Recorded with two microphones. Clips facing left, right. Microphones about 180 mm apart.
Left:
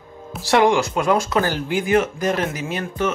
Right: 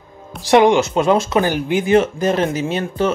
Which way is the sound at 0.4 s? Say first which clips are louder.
Right 4 dB; 20° right (ahead or behind).